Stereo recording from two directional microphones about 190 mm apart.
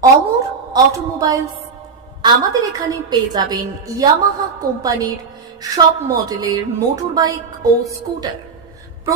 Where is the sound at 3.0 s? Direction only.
20° right (ahead or behind).